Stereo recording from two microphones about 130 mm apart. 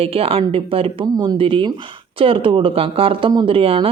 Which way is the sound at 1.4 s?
45° right (ahead or behind).